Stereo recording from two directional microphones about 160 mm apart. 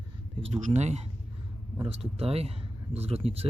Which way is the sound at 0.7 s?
45° right (ahead or behind).